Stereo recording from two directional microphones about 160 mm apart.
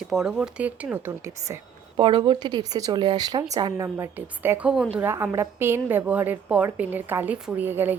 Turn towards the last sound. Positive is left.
turn(degrees=-15)  # may be behind; listen again after turning